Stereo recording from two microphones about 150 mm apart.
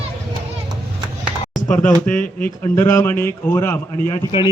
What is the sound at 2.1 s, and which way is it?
Speech, 10° left (ahead or behind).